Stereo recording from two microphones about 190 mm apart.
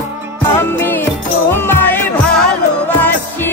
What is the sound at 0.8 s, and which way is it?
Music, 10° left (ahead or behind).